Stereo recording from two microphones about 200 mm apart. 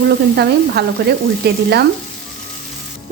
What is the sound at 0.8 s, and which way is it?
Frying, 55° right (ahead or behind).